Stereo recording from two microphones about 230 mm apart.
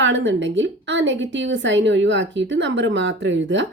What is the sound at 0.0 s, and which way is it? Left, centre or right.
A woman's voice, right.